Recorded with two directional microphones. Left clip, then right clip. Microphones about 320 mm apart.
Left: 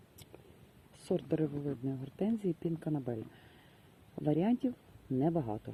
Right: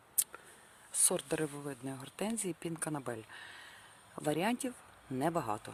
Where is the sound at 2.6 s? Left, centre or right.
Centre.